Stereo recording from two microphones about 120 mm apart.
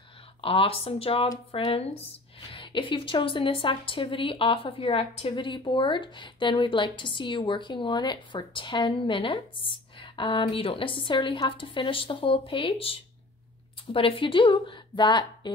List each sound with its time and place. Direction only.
0.4 s a woman's voice: 50° left (ahead or behind)